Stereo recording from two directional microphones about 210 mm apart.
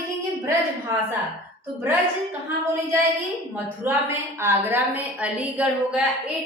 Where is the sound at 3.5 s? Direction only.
10° right (ahead or behind).